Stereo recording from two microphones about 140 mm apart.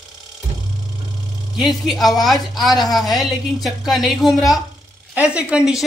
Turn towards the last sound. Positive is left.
turn(degrees=-5)  # may be behind; listen again after turning